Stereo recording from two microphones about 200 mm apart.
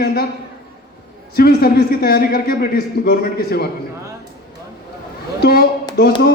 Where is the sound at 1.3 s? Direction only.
50° left (ahead or behind).